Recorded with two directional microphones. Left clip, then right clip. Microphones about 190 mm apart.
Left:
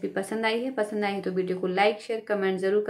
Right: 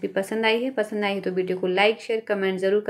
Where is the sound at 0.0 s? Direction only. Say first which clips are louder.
Right 4 dB; 25° right (ahead or behind).